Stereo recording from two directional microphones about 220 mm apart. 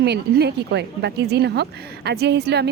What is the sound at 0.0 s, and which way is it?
Speech, 50° right (ahead or behind).